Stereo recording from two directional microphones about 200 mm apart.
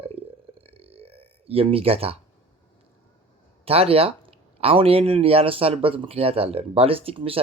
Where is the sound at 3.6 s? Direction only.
30° right (ahead or behind).